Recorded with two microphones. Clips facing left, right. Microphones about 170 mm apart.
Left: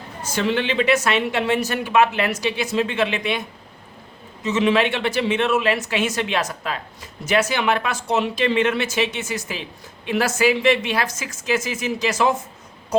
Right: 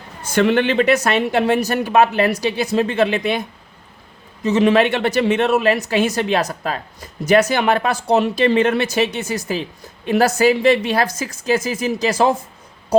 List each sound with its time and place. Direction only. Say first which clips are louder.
0.3 s speech: right 6 dB; 55° right (ahead or behind)
4.4 s speech: right 4 dB; 40° right (ahead or behind)